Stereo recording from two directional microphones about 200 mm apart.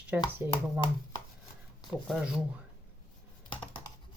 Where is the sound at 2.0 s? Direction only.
5° right (ahead or behind).